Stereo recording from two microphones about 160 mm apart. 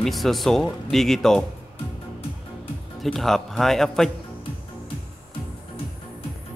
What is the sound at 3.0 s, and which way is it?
Speech, centre (ahead or behind).